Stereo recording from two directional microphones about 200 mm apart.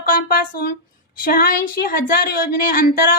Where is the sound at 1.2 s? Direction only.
45° left (ahead or behind).